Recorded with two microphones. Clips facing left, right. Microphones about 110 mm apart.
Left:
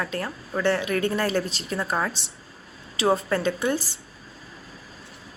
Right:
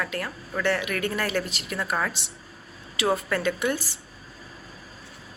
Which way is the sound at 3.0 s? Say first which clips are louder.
Left 3 dB; 30° left (ahead or behind).